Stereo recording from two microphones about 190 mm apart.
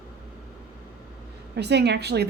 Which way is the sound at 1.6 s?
60° right (ahead or behind).